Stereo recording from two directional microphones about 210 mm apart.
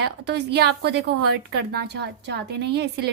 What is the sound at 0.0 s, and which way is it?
A woman's voice, 55° right (ahead or behind).